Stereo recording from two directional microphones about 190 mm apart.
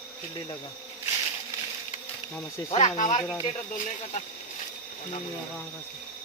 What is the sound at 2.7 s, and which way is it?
Speech, 30° left (ahead or behind).